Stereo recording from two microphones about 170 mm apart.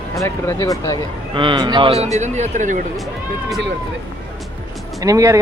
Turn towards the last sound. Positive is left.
turn(degrees=-20)  # may be behind; listen again after turning